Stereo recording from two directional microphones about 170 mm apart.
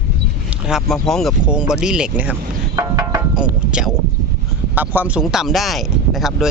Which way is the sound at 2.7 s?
20° right (ahead or behind).